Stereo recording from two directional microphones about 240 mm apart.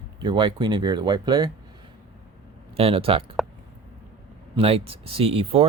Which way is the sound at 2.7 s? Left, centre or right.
Right.